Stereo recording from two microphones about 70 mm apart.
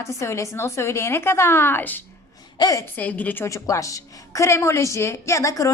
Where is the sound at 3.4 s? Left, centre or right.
Left.